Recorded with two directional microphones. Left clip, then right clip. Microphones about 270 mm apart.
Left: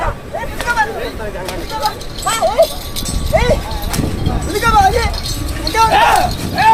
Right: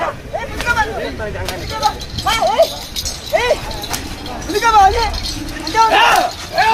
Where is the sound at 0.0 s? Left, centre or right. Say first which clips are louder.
Even; centre.